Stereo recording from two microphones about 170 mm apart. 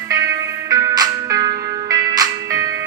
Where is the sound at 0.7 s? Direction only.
20° right (ahead or behind).